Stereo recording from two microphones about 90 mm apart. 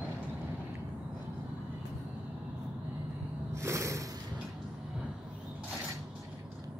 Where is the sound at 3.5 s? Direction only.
30° right (ahead or behind).